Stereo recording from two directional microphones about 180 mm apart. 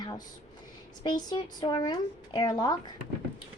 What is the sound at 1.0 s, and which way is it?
A woman's voice, 25° left (ahead or behind).